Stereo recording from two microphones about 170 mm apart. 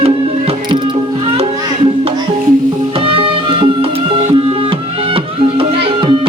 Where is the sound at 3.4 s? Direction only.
30° right (ahead or behind).